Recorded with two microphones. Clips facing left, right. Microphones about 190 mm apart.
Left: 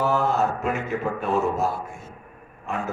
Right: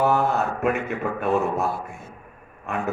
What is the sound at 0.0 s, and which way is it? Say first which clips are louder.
Mantra: right 1 dB; 60° right (ahead or behind).